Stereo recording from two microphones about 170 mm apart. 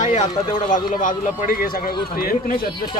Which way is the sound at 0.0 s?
45° left (ahead or behind).